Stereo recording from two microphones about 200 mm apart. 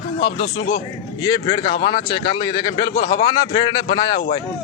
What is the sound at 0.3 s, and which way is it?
Speech, 50° left (ahead or behind).